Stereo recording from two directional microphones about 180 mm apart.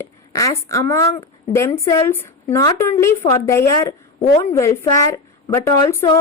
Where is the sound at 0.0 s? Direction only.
15° left (ahead or behind).